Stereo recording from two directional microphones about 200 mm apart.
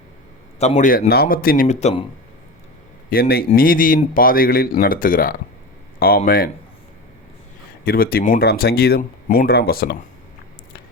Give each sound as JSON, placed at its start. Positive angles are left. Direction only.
{"t": 0.6, "sound": "a man's voice", "side_deg": 35}
{"t": 3.1, "sound": "a man's voice", "side_deg": 50}
{"t": 7.9, "sound": "a man's voice", "side_deg": 50}